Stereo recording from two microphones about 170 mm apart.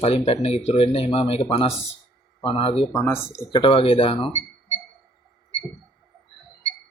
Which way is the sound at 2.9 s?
15° left (ahead or behind).